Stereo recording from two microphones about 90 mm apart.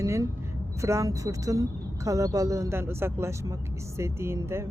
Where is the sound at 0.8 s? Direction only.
35° right (ahead or behind).